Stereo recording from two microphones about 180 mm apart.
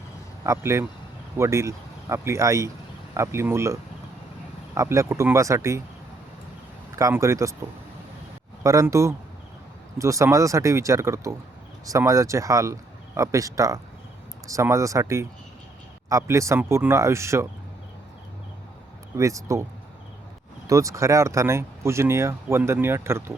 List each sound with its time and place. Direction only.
0.4 s speech: 15° right (ahead or behind)
6.9 s speech: 15° right (ahead or behind)
19.1 s speech: 15° right (ahead or behind)
20.7 s speech: 15° right (ahead or behind)